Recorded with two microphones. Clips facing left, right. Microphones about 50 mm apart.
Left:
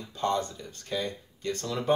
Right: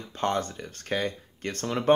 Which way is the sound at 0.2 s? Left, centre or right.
Right.